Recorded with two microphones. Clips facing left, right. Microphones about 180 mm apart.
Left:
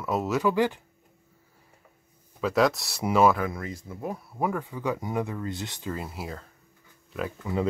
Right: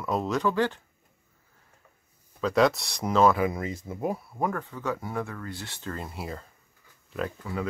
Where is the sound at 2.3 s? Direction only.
5° left (ahead or behind).